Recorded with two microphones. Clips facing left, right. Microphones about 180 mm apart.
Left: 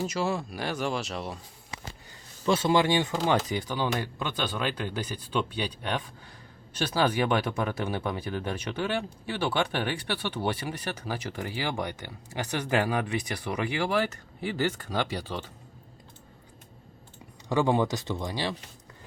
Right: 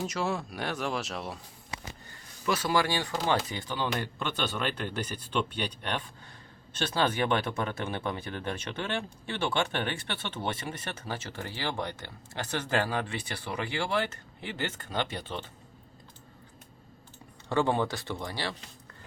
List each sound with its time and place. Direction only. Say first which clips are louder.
0.0 s speech: left 2 dB; centre (ahead or behind)
2.5 s speech: left 4 dB; 25° left (ahead or behind)
14.9 s speech: left 3 dB; 10° left (ahead or behind)
17.5 s speech: left 3 dB; 15° left (ahead or behind)